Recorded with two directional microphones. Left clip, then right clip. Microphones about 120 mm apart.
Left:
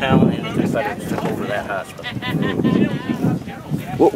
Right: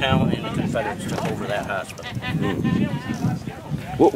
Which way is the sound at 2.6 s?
50° left (ahead or behind).